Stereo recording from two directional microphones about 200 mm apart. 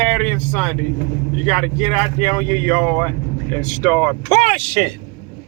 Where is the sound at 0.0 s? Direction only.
5° left (ahead or behind).